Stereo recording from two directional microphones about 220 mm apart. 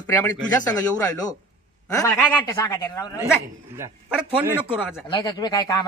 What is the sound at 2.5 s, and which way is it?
Speech, 15° left (ahead or behind).